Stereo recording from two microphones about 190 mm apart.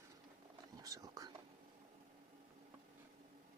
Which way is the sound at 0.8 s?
20° right (ahead or behind).